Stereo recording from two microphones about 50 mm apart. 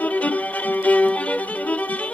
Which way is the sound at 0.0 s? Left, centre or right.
Left.